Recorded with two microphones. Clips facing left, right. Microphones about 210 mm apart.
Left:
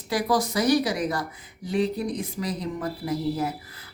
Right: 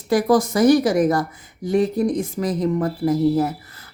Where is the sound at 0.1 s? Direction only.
50° right (ahead or behind).